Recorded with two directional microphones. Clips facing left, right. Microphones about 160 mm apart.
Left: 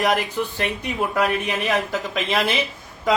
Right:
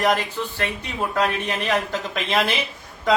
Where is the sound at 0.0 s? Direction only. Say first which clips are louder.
Even; 10° left (ahead or behind).